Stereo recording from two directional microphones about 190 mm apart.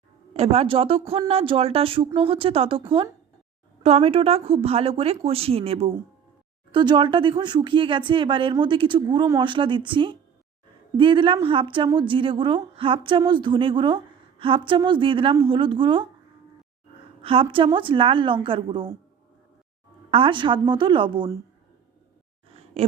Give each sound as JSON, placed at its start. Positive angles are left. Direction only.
{"t": 0.3, "sound": "a woman's voice", "side_deg": -30}
{"t": 3.8, "sound": "a woman's voice", "side_deg": -30}
{"t": 17.2, "sound": "a woman's voice", "side_deg": -30}
{"t": 20.1, "sound": "a woman's voice", "side_deg": -30}
{"t": 22.5, "sound": "a sound", "side_deg": -35}